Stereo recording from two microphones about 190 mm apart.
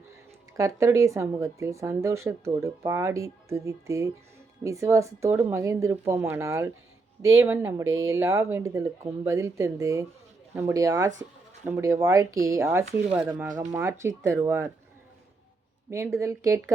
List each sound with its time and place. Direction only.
0.5 s speech: 15° right (ahead or behind)
15.9 s speech: 15° right (ahead or behind)